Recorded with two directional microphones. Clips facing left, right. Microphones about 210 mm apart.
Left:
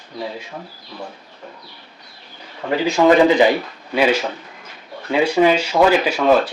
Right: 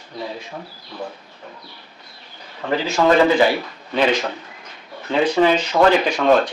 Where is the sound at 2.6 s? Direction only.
15° left (ahead or behind).